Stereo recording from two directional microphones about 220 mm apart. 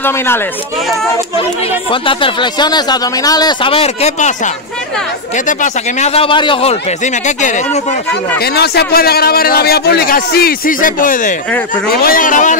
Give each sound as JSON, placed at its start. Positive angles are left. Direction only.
{"t": 1.9, "sound": "speech", "side_deg": 25}
{"t": 5.5, "sound": "speech", "side_deg": 35}
{"t": 8.1, "sound": "speech", "side_deg": 45}